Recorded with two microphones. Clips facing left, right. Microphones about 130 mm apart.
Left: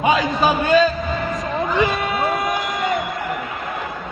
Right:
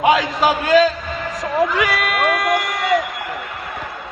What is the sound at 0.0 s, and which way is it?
Speech, 90° right.